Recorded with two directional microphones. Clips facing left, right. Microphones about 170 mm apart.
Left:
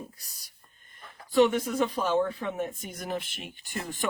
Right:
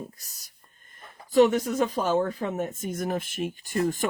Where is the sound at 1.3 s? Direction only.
40° right (ahead or behind).